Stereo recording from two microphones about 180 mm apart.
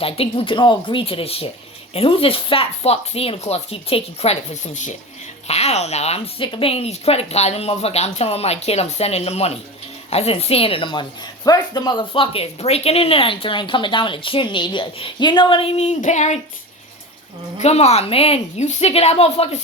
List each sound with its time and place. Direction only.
0.0 s speech: 30° left (ahead or behind)
17.6 s speech: 35° left (ahead or behind)